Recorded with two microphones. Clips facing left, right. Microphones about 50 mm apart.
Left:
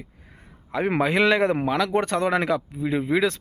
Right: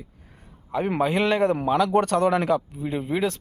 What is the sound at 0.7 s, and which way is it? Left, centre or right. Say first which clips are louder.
Speech: left 1 dB; left.